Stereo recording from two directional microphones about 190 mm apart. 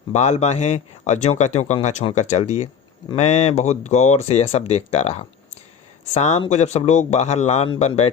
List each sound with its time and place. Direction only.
0.1 s speech: 35° left (ahead or behind)